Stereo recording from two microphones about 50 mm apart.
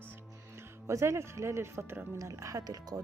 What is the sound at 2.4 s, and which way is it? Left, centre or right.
Speech, right.